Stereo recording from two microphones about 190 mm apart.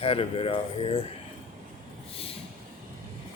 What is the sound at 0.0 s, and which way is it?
Speech, 30° left (ahead or behind).